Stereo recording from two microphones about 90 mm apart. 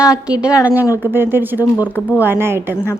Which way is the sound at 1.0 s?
25° right (ahead or behind).